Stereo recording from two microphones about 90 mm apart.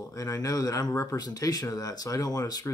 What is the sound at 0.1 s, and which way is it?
Speech, 40° left (ahead or behind).